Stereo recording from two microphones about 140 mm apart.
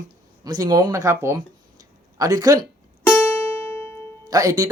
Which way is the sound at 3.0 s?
15° left (ahead or behind).